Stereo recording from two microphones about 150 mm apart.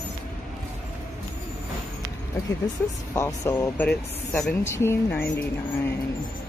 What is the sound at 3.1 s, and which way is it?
Speech, 20° left (ahead or behind).